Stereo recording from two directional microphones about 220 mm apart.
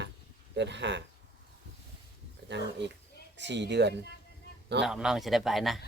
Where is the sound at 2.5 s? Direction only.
50° right (ahead or behind).